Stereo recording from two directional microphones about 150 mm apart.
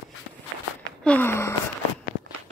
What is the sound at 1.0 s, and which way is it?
Gasp, 10° left (ahead or behind).